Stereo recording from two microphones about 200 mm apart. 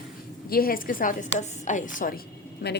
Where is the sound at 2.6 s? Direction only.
55° left (ahead or behind).